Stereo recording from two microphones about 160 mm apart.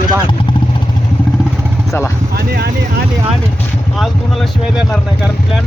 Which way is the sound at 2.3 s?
80° right.